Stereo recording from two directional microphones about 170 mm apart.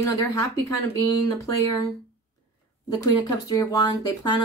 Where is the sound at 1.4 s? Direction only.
20° left (ahead or behind).